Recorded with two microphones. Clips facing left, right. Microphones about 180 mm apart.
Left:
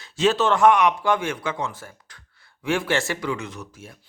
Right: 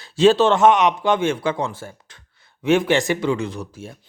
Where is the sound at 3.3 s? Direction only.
30° right (ahead or behind).